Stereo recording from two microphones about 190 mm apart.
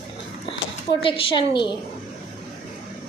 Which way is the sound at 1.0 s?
25° left (ahead or behind).